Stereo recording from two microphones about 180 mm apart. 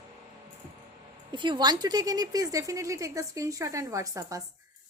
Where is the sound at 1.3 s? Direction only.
25° right (ahead or behind).